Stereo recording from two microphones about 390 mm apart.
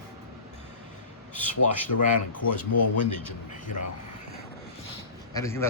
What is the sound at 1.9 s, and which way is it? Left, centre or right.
Speech, left.